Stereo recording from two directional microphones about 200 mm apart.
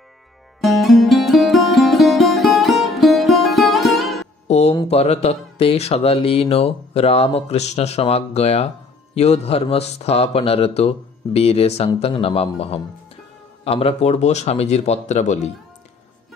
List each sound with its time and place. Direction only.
0.6 s music: centre (ahead or behind)
4.5 s a sound: 30° left (ahead or behind)
4.8 s speech: 30° left (ahead or behind)